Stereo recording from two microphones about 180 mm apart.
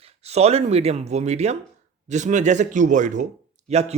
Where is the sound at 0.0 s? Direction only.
35° right (ahead or behind).